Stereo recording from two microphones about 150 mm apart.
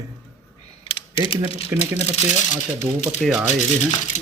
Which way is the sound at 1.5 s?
45° left (ahead or behind).